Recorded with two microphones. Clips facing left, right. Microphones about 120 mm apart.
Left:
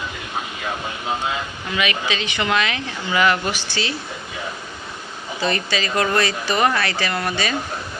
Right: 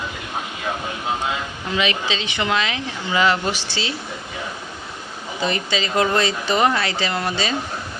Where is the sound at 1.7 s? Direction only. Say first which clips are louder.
Right 1 dB; 30° right (ahead or behind).